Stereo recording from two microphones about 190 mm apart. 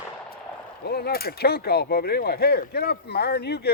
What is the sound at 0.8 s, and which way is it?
Speech, 55° left (ahead or behind).